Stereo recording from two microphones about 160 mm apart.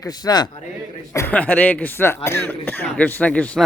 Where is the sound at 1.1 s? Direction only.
15° left (ahead or behind).